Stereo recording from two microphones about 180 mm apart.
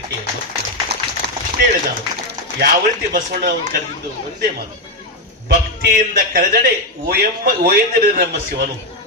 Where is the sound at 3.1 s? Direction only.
55° right (ahead or behind).